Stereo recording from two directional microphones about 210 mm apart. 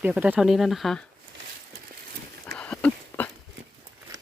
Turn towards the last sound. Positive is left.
turn(degrees=5)  # may be behind; listen again after turning